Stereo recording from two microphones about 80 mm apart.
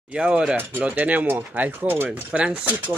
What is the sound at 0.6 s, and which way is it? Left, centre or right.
Speech, right.